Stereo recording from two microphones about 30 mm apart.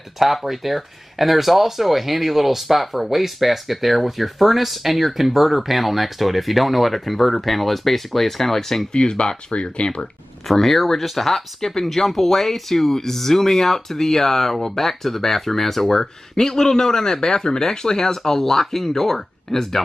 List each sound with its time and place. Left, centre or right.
0.2 s speech: centre
8.9 s speech: left
10.5 s speech: centre